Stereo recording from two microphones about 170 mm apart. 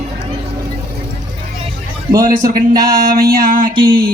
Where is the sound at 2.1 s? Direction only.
55° right (ahead or behind).